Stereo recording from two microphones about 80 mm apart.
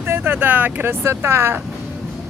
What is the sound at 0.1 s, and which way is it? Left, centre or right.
Speech, right.